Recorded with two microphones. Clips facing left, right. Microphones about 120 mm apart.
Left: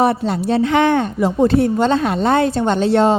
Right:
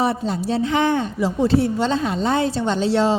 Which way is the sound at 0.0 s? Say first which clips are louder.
Left 5 dB; 65° left (ahead or behind).